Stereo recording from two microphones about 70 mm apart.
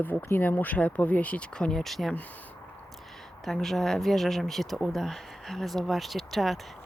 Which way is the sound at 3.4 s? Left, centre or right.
Centre.